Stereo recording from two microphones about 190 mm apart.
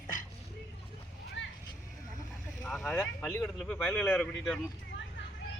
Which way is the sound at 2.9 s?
10° left (ahead or behind).